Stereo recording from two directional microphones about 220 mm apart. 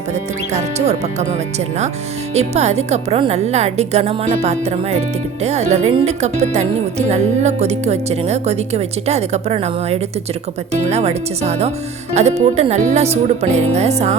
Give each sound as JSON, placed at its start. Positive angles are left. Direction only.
{"t": 0.8, "sound": "speech", "side_deg": -30}
{"t": 6.4, "sound": "music", "side_deg": -30}
{"t": 7.1, "sound": "speech", "side_deg": -30}
{"t": 13.7, "sound": "music", "side_deg": -30}